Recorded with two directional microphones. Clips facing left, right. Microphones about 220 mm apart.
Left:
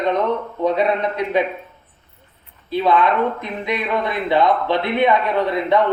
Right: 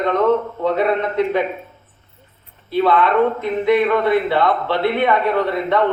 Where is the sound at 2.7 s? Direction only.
15° left (ahead or behind).